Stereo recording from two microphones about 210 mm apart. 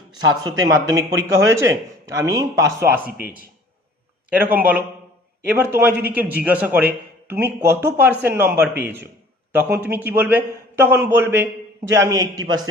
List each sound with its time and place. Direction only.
0.4 s a man's voice: 15° right (ahead or behind)
4.3 s a man's voice: 10° right (ahead or behind)